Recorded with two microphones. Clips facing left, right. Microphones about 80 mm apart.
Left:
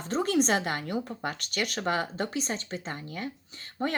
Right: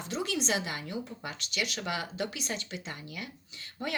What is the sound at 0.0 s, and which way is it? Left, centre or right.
Speech, left.